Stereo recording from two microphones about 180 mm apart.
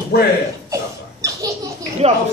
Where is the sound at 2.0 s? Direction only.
35° right (ahead or behind).